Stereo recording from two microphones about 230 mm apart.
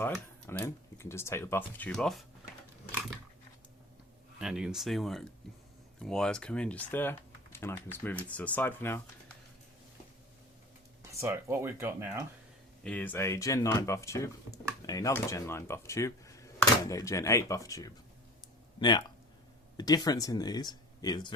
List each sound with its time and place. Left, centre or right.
0.1 s speech: centre
4.4 s speech: centre
11.2 s speech: centre
12.8 s speech: centre